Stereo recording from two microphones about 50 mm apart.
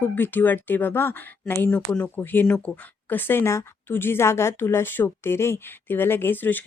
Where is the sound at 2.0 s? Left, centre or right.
Left.